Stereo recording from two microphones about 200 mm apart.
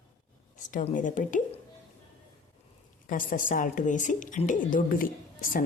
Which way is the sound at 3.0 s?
40° left (ahead or behind).